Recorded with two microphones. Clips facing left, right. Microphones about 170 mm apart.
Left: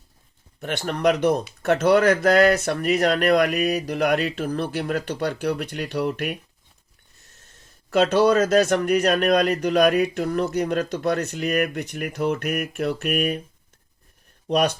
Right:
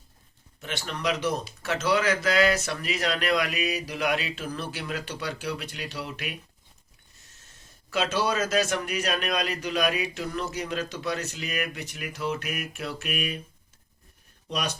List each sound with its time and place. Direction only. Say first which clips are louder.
0.6 s speech: left 9 dB; 55° left (ahead or behind)
8.1 s speech: left 9 dB; 55° left (ahead or behind)
14.4 s speech: left 11 dB; 60° left (ahead or behind)